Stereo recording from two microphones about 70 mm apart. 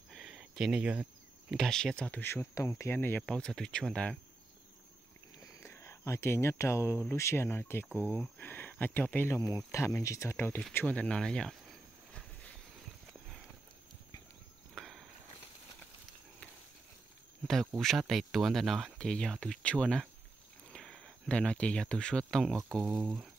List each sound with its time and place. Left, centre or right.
0.6 s speech: centre
1.5 s speech: centre
2.0 s speech: left
2.5 s speech: left
2.9 s speech: left
3.2 s speech: centre
5.6 s speech: left
9.3 s speech: left
10.3 s speech: left
11.0 s speech: centre
14.8 s a sound: centre
17.7 s speech: centre
18.9 s speech: centre